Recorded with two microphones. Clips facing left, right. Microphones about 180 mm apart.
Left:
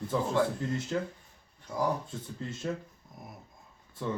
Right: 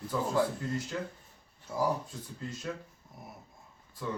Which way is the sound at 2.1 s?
25° left (ahead or behind).